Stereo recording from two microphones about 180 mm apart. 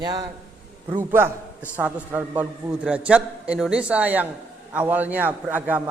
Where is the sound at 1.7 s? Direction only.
10° right (ahead or behind).